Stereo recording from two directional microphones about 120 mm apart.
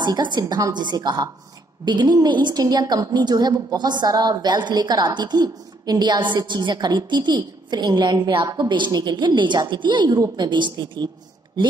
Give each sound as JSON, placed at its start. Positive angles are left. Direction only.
{"t": 0.0, "sound": "a woman's voice", "side_deg": -40}